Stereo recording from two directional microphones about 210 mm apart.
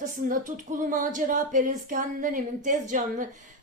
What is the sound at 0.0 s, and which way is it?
Speech, 40° right (ahead or behind).